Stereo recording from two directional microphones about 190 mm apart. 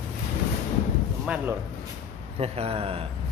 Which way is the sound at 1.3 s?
5° right (ahead or behind).